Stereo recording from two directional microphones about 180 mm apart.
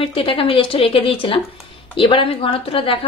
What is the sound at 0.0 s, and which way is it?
A woman's voice, 30° left (ahead or behind).